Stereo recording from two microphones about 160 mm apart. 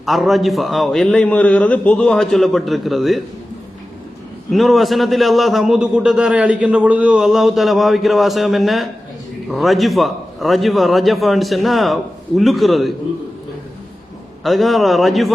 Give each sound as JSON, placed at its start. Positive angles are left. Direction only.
{"t": 0.0, "sound": "a man's voice", "side_deg": 0}
{"t": 4.5, "sound": "a man's voice", "side_deg": 0}
{"t": 14.4, "sound": "a man's voice", "side_deg": 0}